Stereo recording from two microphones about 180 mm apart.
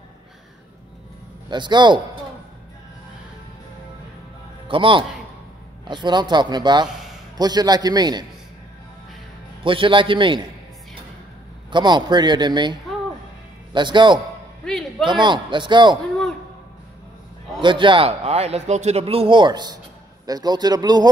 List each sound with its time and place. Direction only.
1.5 s speech: 25° right (ahead or behind)
4.6 s a man's voice: 30° right (ahead or behind)
9.6 s speech: 30° right (ahead or behind)
11.7 s speech: 25° right (ahead or behind)
13.7 s speech: 25° right (ahead or behind)
14.6 s a sound: 5° left (ahead or behind)
15.0 s speech: 25° right (ahead or behind)
17.6 s a man's voice: 25° right (ahead or behind)